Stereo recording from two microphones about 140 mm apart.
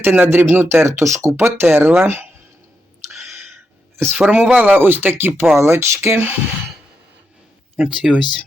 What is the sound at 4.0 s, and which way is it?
Speech, 15° right (ahead or behind).